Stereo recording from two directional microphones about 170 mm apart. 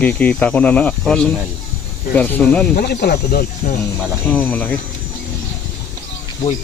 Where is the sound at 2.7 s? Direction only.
70° left (ahead or behind).